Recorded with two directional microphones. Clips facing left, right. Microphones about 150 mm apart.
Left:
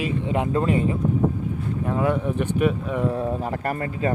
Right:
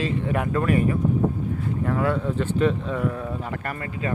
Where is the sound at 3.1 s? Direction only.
35° left (ahead or behind).